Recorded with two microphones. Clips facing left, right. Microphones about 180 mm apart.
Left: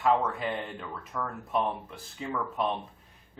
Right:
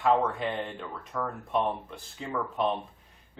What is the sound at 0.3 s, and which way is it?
Speech, centre (ahead or behind).